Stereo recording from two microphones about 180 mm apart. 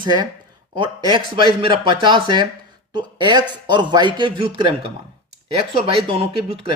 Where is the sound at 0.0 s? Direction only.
25° right (ahead or behind).